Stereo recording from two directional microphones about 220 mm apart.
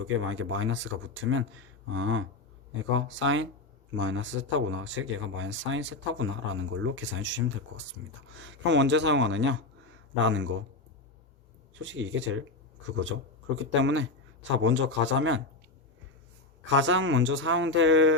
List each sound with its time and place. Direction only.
0.0 s speech: 65° right (ahead or behind)
11.7 s speech: 60° right (ahead or behind)
13.6 s speech: 55° right (ahead or behind)
16.6 s speech: 60° right (ahead or behind)